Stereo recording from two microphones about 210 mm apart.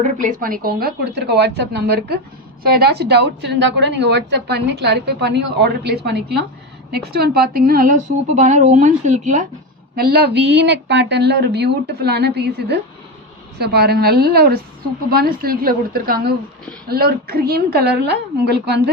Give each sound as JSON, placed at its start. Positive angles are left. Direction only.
{"t": 0.0, "sound": "a woman's voice", "side_deg": -40}
{"t": 9.9, "sound": "a woman's voice", "side_deg": -45}